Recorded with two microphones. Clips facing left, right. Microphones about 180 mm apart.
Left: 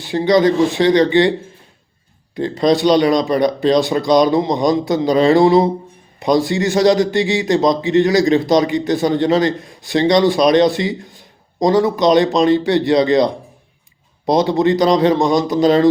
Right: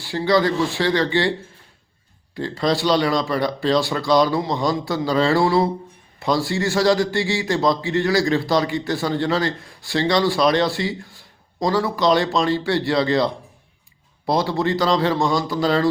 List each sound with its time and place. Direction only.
0.0 s a man's voice: 20° left (ahead or behind)
2.3 s a man's voice: 20° left (ahead or behind)